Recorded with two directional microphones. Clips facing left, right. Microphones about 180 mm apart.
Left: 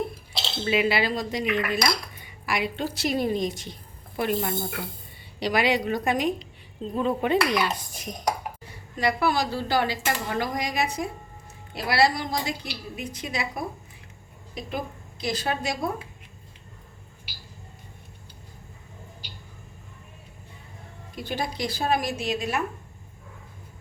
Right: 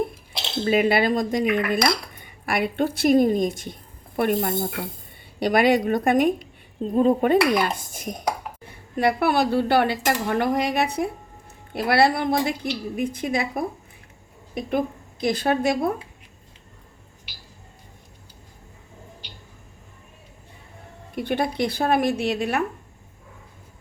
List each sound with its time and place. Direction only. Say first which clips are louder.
0.6 s cutlery: right 4 dB; 45° right (ahead or behind)
8.6 s speech: right 5 dB; 55° right (ahead or behind)
13.0 s cutlery: right 7 dB; 55° right (ahead or behind)
14.5 s a woman's voice: right 8 dB; 55° right (ahead or behind)
21.2 s speech: right 6 dB; 60° right (ahead or behind)